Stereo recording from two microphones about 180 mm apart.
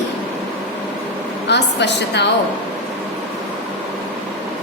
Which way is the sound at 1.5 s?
70° left (ahead or behind).